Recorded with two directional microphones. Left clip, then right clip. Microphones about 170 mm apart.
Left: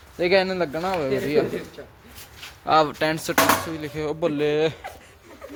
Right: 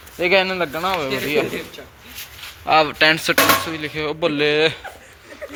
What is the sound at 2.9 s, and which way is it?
Speech, 10° left (ahead or behind).